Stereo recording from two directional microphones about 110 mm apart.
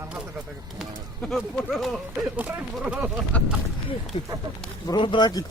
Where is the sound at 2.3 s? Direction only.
15° right (ahead or behind).